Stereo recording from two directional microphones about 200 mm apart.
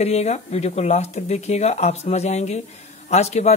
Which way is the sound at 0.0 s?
30° left (ahead or behind).